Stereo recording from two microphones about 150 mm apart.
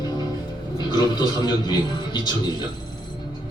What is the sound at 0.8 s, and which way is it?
A man's voice, 30° left (ahead or behind).